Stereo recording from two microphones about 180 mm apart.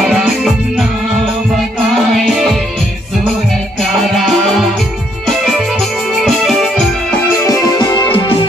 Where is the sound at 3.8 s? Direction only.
Centre (ahead or behind).